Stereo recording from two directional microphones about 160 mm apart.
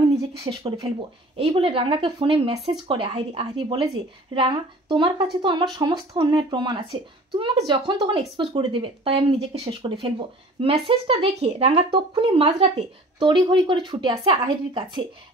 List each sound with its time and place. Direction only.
0.4 s speech: 25° right (ahead or behind)